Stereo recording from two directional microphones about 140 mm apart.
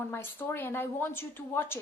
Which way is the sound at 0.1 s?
15° left (ahead or behind).